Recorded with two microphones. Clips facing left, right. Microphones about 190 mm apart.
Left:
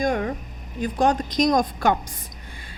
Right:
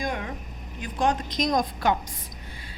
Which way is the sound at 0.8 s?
40° left (ahead or behind).